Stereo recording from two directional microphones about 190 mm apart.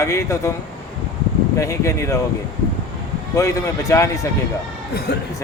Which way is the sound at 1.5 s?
15° left (ahead or behind).